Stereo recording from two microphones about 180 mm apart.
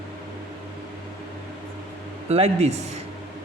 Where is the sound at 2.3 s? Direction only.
35° right (ahead or behind).